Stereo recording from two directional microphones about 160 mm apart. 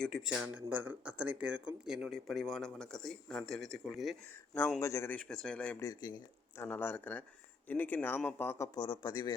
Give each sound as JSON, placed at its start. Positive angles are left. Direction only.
{"t": 0.0, "sound": "speech", "side_deg": 0}
{"t": 4.8, "sound": "a man's voice", "side_deg": 20}
{"t": 5.1, "sound": "speech", "side_deg": 5}
{"t": 5.8, "sound": "speech", "side_deg": 25}
{"t": 6.6, "sound": "a man's voice", "side_deg": 10}